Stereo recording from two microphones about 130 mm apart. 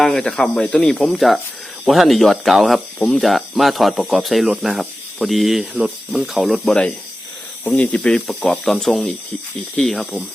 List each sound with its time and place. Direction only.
0.0 s speech: 5° left (ahead or behind)